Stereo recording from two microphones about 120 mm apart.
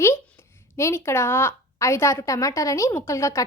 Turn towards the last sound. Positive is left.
turn(degrees=25)  # may be behind; listen again after turning